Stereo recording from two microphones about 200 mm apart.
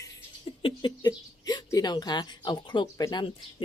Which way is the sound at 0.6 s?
20° left (ahead or behind).